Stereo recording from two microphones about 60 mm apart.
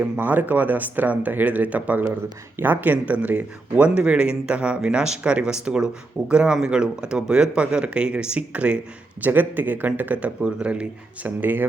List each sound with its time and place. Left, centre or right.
0.0 s speech: right
9.2 s speech: right